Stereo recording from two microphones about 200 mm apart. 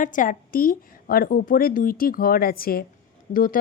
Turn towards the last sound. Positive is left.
turn(degrees=45)  # may be behind; listen again after turning